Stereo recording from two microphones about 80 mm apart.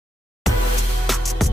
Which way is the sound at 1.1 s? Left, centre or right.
Centre.